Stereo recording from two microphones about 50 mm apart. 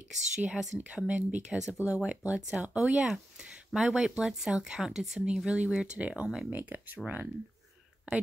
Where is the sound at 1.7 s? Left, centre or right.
Left.